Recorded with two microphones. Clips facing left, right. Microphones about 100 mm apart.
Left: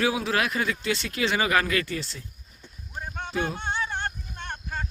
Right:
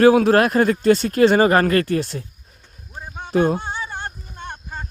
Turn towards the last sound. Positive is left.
turn(degrees=-15)  # may be behind; listen again after turning